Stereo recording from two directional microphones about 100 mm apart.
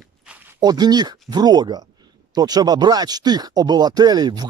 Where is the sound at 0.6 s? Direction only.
40° right (ahead or behind).